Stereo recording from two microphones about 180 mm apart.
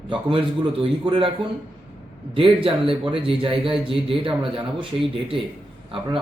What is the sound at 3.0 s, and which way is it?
Speech, 30° right (ahead or behind).